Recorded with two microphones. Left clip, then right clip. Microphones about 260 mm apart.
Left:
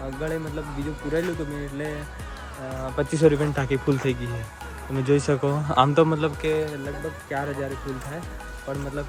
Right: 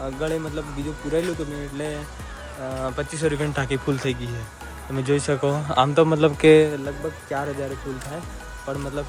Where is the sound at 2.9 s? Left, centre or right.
Centre.